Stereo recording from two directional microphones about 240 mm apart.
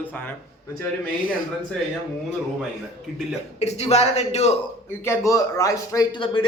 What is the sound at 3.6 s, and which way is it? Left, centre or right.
Speech, left.